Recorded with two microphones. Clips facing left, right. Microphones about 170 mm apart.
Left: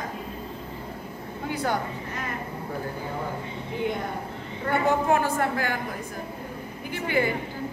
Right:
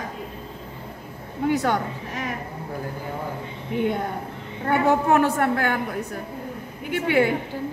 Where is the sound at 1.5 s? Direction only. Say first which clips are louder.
Right 4 dB; 75° right (ahead or behind).